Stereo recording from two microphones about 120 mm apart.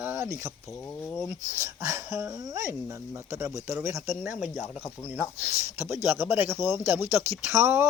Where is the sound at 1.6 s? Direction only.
20° right (ahead or behind).